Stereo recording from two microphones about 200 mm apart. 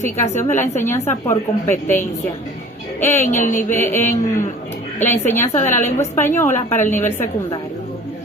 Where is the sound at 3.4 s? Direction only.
40° left (ahead or behind).